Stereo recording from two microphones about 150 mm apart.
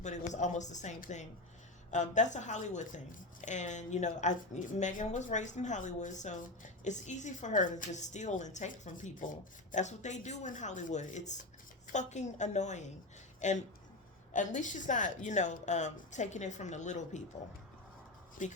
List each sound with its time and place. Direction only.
0.0 s a woman's voice: 50° left (ahead or behind)
18.4 s speech: 60° left (ahead or behind)